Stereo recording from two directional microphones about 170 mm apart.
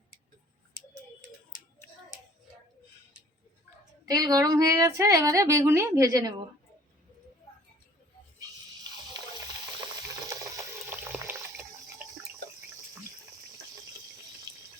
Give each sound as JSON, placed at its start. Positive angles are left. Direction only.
{"t": 4.1, "sound": "a woman's voice", "side_deg": -20}
{"t": 9.2, "sound": "water", "side_deg": -25}